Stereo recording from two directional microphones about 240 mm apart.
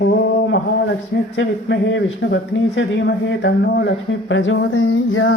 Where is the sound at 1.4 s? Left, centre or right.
Left.